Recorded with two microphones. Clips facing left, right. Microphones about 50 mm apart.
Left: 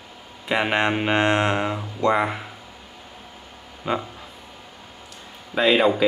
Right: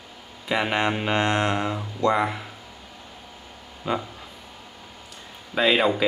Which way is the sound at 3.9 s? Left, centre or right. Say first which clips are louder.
Left 1 dB; left.